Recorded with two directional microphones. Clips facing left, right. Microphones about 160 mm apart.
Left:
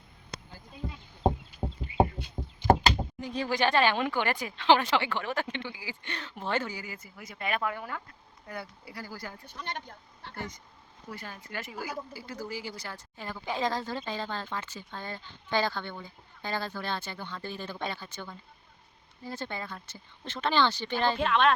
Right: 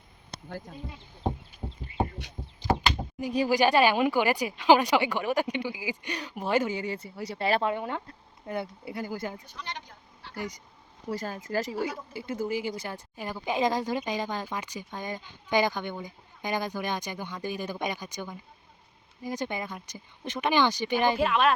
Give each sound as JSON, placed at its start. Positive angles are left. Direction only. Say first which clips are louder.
{"t": 2.6, "sound": "door", "louder": "left 4 dB", "side_deg": -35}
{"t": 3.2, "sound": "speech", "louder": "right 5 dB", "side_deg": -15}
{"t": 6.7, "sound": "speech", "louder": "right 9 dB", "side_deg": -30}
{"t": 9.6, "sound": "a sound", "louder": "left 1 dB", "side_deg": 50}
{"t": 11.1, "sound": "speech", "louder": "right 10 dB", "side_deg": -40}